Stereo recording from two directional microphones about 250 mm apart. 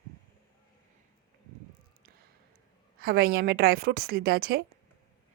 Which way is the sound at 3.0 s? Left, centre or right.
Right.